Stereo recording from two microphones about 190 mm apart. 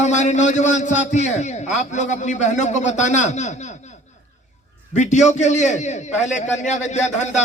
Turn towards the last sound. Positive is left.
turn(degrees=35)  # may be behind; listen again after turning